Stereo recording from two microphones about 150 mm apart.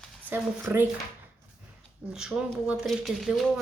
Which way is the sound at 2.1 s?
5° right (ahead or behind).